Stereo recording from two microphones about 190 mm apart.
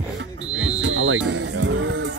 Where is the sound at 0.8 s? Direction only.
75° right (ahead or behind).